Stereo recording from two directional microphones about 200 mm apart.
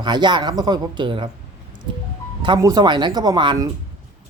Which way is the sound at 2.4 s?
20° right (ahead or behind).